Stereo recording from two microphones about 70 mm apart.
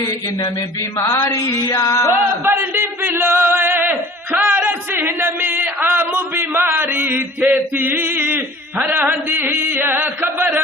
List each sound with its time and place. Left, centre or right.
0.9 s mantra: left
2.4 s battle cry: right
2.8 s a sound: right
8.8 s mantra: right